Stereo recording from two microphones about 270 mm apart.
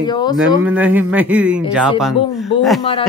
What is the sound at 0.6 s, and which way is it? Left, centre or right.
Speech, centre.